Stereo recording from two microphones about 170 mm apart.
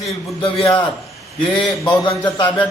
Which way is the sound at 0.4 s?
35° left (ahead or behind).